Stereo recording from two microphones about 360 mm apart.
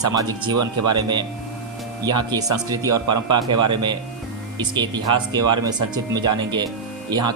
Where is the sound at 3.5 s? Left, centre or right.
Right.